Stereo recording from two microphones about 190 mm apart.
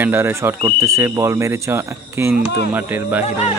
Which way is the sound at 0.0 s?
10° right (ahead or behind).